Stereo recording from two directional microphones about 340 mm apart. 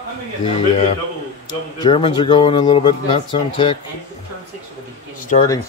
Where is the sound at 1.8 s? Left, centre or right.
Centre.